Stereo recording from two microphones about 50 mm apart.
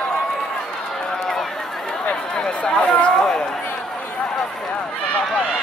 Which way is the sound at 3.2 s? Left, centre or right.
Centre.